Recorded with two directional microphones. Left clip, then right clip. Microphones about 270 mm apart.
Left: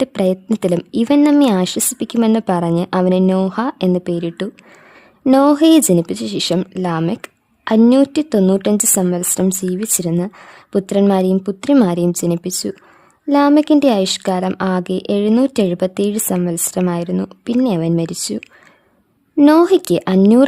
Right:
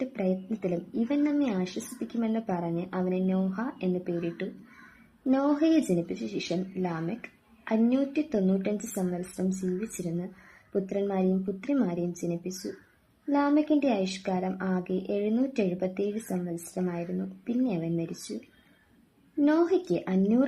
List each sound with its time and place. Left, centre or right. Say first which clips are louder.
0.0 s a woman's voice: left 14 dB; left
10.7 s a woman's voice: left 15 dB; left